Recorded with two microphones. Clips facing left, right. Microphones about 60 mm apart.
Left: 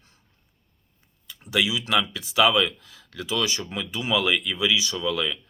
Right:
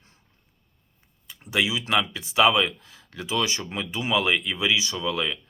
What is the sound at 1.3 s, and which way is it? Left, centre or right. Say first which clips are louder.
Speech: even; right.